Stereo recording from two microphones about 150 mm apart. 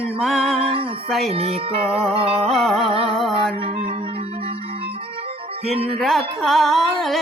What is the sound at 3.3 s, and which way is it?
Music, 40° right (ahead or behind).